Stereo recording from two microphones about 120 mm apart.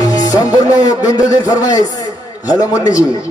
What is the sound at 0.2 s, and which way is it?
Music, 30° left (ahead or behind).